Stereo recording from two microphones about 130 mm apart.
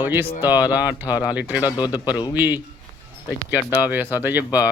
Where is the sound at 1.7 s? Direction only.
35° left (ahead or behind).